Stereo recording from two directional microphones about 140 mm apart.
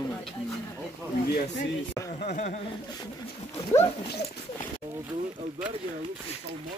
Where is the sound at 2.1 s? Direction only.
65° left (ahead or behind).